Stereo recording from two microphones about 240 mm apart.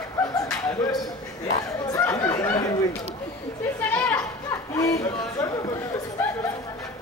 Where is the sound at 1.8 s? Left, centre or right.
Centre.